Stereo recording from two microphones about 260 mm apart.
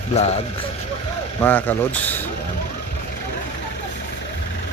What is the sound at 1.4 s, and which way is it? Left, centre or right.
Speech, centre.